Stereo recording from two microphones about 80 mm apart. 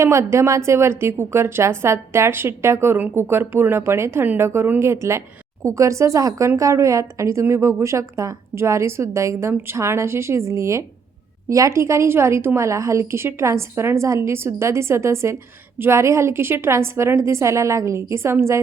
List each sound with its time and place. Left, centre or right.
0.0 s a woman's voice: right